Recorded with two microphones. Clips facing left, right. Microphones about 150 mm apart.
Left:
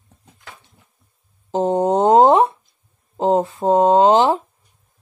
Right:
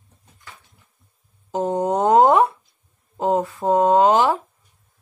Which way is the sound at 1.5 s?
25° left (ahead or behind).